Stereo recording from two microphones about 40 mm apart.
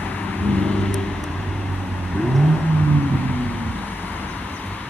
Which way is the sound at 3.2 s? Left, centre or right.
Left.